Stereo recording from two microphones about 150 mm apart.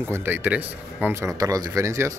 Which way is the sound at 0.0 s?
15° right (ahead or behind).